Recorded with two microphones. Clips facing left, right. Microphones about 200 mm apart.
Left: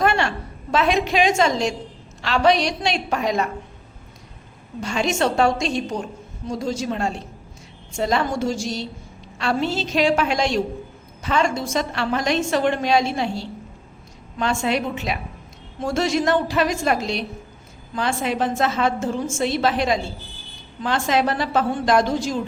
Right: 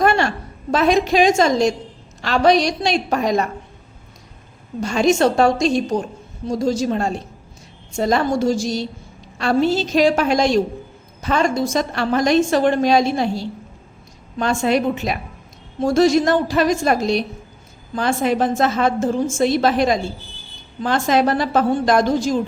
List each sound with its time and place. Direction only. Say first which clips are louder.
0.0 s a woman's voice: right 3 dB; 40° right (ahead or behind)
4.8 s a woman's voice: right 6 dB; 40° right (ahead or behind)